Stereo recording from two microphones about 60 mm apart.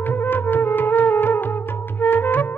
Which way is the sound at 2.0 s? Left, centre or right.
Left.